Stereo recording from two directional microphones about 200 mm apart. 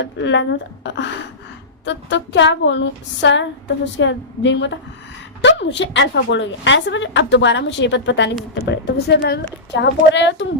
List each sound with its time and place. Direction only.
0.0 s a woman's voice: 65° left (ahead or behind)